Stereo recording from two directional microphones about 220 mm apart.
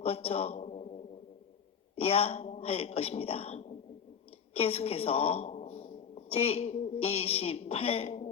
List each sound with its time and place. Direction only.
0.0 s a man's voice: 25° left (ahead or behind)
2.0 s a woman's voice: 25° left (ahead or behind)